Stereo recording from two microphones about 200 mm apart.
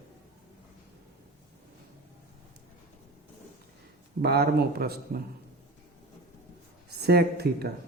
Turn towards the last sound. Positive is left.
turn(degrees=-50)  # may be behind; listen again after turning